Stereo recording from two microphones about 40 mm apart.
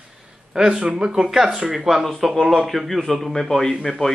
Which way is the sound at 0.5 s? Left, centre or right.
Centre.